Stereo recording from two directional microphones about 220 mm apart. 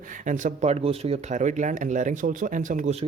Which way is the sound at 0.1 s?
35° right (ahead or behind).